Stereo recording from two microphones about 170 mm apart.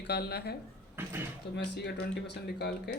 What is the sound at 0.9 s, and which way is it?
Speech, 15° right (ahead or behind).